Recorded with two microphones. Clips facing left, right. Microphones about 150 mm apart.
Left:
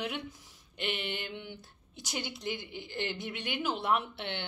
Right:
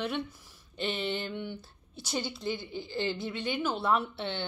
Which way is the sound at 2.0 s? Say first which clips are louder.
Right 4 dB; 15° left (ahead or behind).